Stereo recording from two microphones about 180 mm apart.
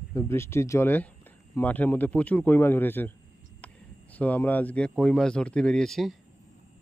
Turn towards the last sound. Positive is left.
turn(degrees=0)  # may be behind; listen again after turning